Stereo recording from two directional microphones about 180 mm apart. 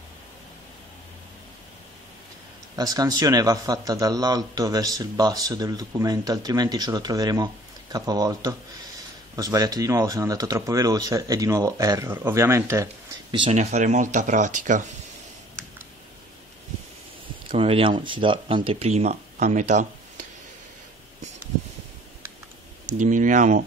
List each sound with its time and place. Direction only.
2.7 s speech: 20° right (ahead or behind)
13.3 s speech: 30° right (ahead or behind)
13.6 s speech: 40° right (ahead or behind)
17.5 s speech: 30° right (ahead or behind)
22.9 s speech: 45° right (ahead or behind)